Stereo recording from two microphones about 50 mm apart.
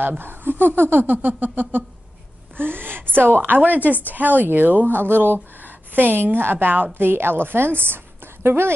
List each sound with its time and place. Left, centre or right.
0.2 s speech: right